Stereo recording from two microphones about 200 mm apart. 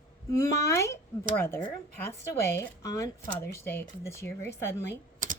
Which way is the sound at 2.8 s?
15° left (ahead or behind).